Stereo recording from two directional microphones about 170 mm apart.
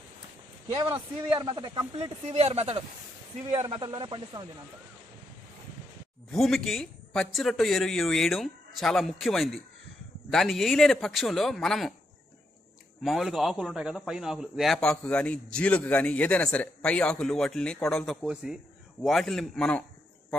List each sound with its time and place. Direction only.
1.3 s speech: 30° right (ahead or behind)
3.7 s speech: 25° right (ahead or behind)
6.3 s a man's voice: centre (ahead or behind)
13.0 s a man's voice: centre (ahead or behind)